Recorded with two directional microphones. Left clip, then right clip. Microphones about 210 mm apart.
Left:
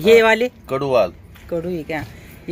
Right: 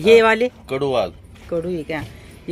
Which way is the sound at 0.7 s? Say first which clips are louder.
Left 6 dB; 30° left (ahead or behind).